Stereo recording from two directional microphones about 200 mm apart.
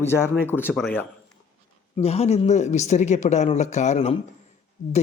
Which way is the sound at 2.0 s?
30° left (ahead or behind).